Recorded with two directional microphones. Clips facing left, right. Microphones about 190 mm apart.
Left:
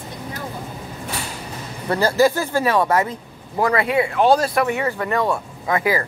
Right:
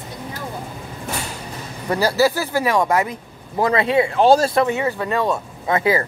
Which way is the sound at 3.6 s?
25° right (ahead or behind).